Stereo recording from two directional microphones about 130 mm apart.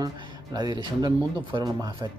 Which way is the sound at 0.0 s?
30° right (ahead or behind).